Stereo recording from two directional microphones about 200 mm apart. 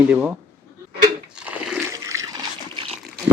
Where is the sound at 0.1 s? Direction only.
5° right (ahead or behind).